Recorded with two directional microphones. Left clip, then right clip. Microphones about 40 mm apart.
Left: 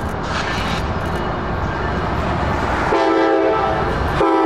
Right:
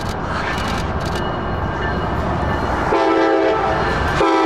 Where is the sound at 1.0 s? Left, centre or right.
Right.